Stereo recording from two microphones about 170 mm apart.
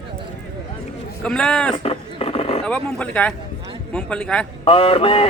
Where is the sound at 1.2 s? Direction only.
5° left (ahead or behind).